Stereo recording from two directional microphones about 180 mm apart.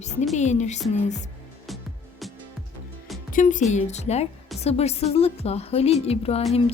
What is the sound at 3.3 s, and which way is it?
A woman's voice, 45° left (ahead or behind).